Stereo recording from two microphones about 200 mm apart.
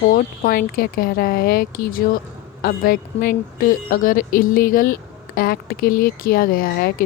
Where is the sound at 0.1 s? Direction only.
45° left (ahead or behind).